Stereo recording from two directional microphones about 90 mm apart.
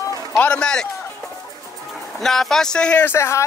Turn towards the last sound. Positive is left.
turn(degrees=30)  # may be behind; listen again after turning